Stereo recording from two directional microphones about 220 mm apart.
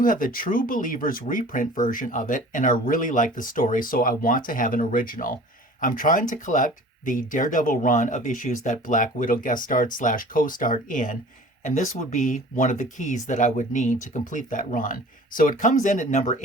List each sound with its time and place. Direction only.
0.0 s speech: 40° left (ahead or behind)